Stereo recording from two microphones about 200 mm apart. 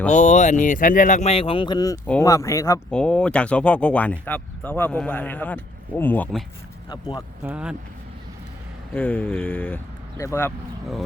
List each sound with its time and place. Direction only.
0.1 s speech: 35° left (ahead or behind); by 6.4 s 10° left (ahead or behind)
6.9 s speech: 20° left (ahead or behind)
7.4 s speech: 5° right (ahead or behind)
8.9 s speech: 10° left (ahead or behind)